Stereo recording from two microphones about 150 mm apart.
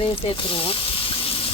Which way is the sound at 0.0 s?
40° left (ahead or behind).